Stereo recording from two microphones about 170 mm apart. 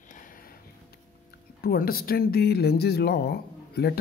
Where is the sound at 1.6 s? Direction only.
60° left (ahead or behind).